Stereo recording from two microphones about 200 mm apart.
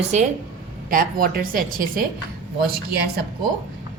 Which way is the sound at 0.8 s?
45° right (ahead or behind).